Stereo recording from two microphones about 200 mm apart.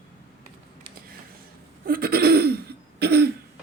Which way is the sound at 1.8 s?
50° right (ahead or behind).